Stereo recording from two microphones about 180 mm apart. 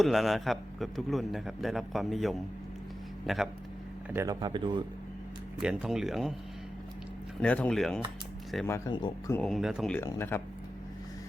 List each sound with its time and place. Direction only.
0.0 s a man's voice: centre (ahead or behind)
4.1 s speech: 15° right (ahead or behind)
5.5 s a man's voice: 5° right (ahead or behind)
7.4 s a man's voice: 5° left (ahead or behind)
8.6 s speech: 15° left (ahead or behind)
9.3 s a man's voice: 5° left (ahead or behind)
10.0 s speech: 15° left (ahead or behind)